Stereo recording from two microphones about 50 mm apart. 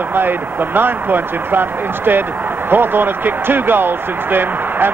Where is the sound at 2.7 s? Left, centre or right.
Right.